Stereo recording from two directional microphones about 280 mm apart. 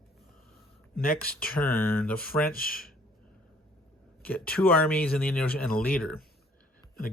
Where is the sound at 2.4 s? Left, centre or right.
Left.